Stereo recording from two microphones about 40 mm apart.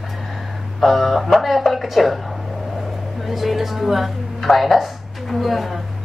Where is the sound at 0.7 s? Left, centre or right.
Centre.